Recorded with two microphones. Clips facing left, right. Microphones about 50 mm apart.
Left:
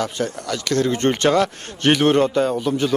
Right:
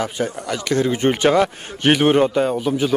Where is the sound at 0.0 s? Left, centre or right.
Centre.